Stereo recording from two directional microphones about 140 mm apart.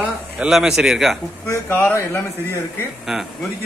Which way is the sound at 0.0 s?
5° right (ahead or behind).